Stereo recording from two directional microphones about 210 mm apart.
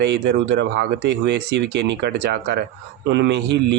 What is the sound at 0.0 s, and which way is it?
Speech, 55° right (ahead or behind).